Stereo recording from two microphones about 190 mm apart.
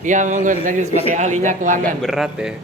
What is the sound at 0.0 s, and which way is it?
A man's voice, 40° right (ahead or behind).